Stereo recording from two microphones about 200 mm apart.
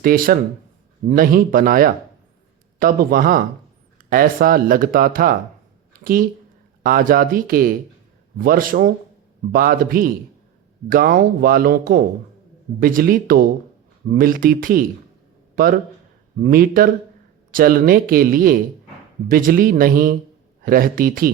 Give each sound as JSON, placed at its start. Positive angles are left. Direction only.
{"t": 0.0, "sound": "speech", "side_deg": -45}
{"t": 6.8, "sound": "speech", "side_deg": -45}